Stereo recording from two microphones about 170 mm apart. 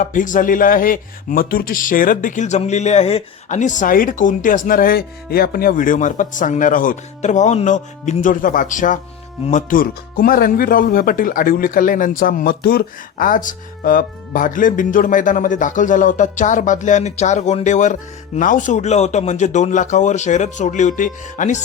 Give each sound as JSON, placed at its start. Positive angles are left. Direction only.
{"t": 0.0, "sound": "speech", "side_deg": 50}